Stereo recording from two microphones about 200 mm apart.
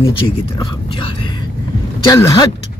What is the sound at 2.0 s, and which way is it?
Speech, 15° left (ahead or behind).